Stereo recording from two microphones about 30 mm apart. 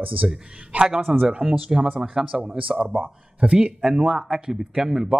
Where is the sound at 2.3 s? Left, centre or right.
Centre.